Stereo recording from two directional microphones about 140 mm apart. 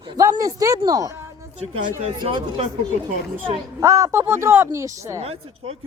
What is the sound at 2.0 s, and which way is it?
Speech, 35° right (ahead or behind).